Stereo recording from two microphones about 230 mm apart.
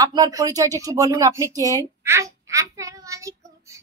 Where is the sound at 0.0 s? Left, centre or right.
Centre.